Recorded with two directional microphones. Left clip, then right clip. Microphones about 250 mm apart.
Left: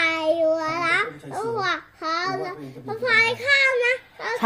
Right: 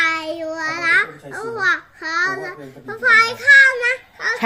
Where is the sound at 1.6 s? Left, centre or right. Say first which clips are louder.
Right 6 dB; centre.